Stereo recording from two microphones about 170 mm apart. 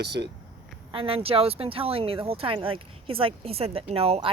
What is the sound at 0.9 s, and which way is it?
Speech, 35° right (ahead or behind).